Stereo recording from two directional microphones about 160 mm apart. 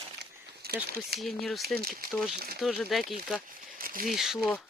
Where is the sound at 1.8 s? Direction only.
65° right (ahead or behind).